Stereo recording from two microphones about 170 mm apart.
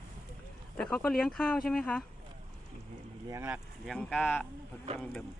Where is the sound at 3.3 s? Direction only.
15° right (ahead or behind).